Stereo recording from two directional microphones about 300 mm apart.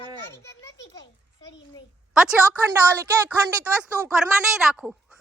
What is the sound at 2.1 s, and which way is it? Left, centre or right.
A woman's voice, centre.